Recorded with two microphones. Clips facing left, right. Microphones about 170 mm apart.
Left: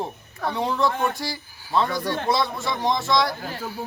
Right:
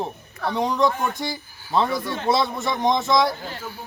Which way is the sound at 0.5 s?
15° right (ahead or behind).